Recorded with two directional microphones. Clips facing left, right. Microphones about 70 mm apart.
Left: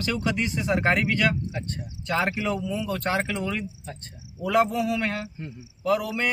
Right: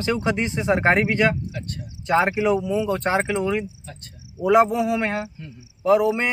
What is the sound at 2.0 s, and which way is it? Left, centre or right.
A man's voice, right.